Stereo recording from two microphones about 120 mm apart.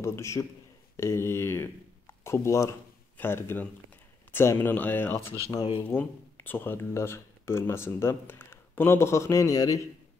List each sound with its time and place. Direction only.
0.0 s speech: 25° left (ahead or behind)
5.6 s speech: 45° left (ahead or behind)
5.9 s speech: 15° left (ahead or behind)